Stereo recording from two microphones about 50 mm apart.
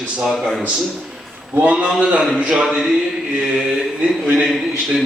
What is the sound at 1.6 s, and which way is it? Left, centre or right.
A man's voice, right.